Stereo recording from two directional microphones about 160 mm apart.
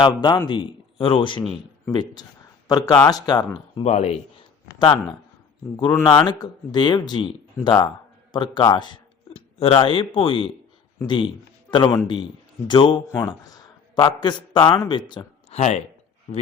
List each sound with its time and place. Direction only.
0.0 s a man's voice: 30° left (ahead or behind)
3.8 s a man's voice: 40° left (ahead or behind)
4.8 s a man's voice: 30° left (ahead or behind)
6.2 s a man's voice: 25° left (ahead or behind)
13.1 s a man's voice: 20° left (ahead or behind)
15.4 s speech: 45° left (ahead or behind)